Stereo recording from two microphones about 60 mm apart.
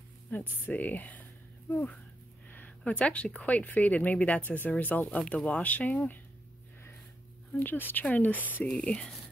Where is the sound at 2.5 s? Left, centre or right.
Left.